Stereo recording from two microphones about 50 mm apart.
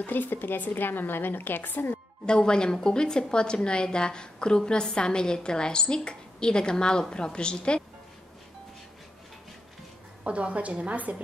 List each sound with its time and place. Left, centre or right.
0.0 s a woman's voice: left
2.2 s a woman's voice: centre
10.2 s a woman's voice: right